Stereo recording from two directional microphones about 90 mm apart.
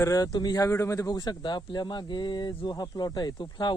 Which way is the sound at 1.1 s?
50° left (ahead or behind).